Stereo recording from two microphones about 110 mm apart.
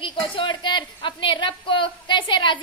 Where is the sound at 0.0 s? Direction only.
50° left (ahead or behind).